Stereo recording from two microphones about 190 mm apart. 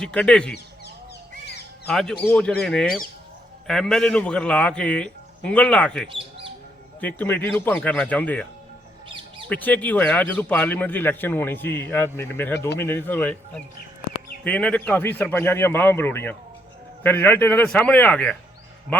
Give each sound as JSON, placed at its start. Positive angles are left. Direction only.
{"t": 0.0, "sound": "a man's voice", "side_deg": 5}
{"t": 1.9, "sound": "a man's voice", "side_deg": 0}
{"t": 6.1, "sound": "bird", "side_deg": -30}
{"t": 7.0, "sound": "speech", "side_deg": 10}
{"t": 9.5, "sound": "speech", "side_deg": 10}